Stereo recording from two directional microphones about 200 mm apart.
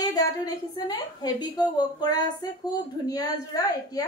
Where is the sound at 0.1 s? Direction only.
20° left (ahead or behind).